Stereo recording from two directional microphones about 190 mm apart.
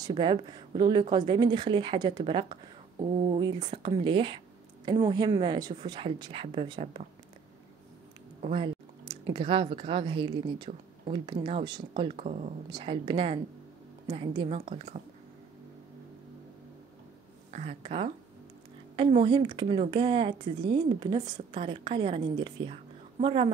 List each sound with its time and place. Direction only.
0.0 s speech: 25° right (ahead or behind)
8.4 s speech: 30° right (ahead or behind)
17.5 s speech: 35° right (ahead or behind)